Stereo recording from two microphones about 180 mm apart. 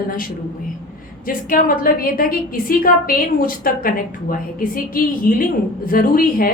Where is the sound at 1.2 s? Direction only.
50° left (ahead or behind).